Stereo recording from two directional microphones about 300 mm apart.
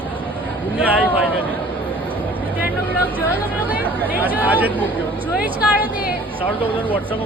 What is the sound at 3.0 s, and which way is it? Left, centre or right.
Speech, centre.